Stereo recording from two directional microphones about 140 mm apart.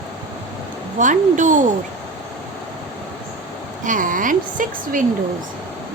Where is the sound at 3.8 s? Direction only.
70° right (ahead or behind).